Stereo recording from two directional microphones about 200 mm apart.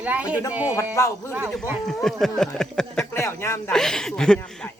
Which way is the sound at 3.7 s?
5° left (ahead or behind).